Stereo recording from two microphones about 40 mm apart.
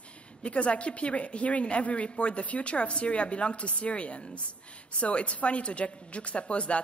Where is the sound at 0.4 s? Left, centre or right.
Left.